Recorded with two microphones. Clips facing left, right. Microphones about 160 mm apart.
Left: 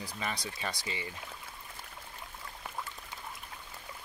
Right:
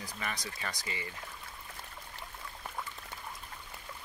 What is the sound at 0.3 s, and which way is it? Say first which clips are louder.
Speech: left 3 dB; 10° left (ahead or behind).